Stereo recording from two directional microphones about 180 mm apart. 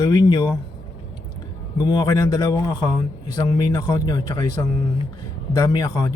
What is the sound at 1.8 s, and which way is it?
A man's voice, 25° left (ahead or behind).